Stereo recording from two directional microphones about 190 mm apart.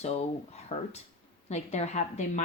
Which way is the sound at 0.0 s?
35° left (ahead or behind).